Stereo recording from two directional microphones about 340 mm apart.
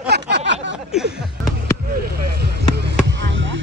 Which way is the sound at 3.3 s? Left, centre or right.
Right.